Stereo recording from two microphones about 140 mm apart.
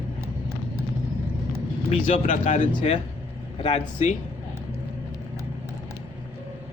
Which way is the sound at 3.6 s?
50° left (ahead or behind).